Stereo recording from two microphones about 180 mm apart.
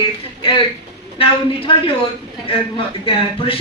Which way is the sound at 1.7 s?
30° left (ahead or behind).